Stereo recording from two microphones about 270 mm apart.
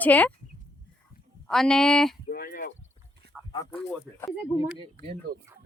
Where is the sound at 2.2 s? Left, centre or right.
Left.